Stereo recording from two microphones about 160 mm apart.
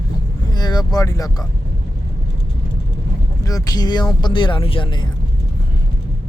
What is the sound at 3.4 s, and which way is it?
Speech, 20° left (ahead or behind).